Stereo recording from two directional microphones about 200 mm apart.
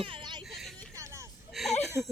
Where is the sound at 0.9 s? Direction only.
15° right (ahead or behind).